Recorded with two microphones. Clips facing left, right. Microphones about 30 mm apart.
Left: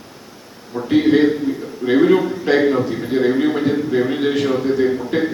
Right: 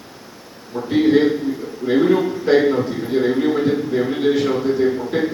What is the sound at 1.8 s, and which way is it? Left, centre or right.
Speech, left.